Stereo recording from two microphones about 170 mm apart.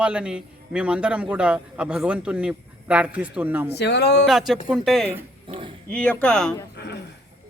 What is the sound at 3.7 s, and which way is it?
Speech, 80° left.